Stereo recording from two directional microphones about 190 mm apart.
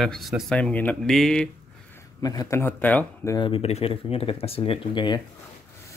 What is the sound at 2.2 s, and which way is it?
Speech, 20° left (ahead or behind).